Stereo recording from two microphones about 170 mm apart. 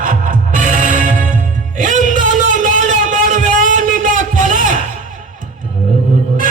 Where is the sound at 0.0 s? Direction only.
50° right (ahead or behind).